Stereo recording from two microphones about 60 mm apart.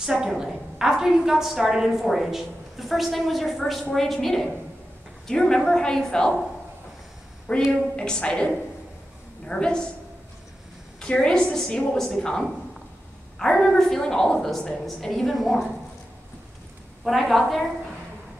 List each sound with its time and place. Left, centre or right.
0.0 s a woman's voice: centre
7.5 s a woman's voice: centre
11.0 s a woman's voice: centre
17.0 s a woman's voice: centre